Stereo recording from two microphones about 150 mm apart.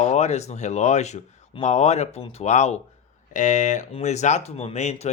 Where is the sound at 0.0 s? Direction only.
50° left (ahead or behind).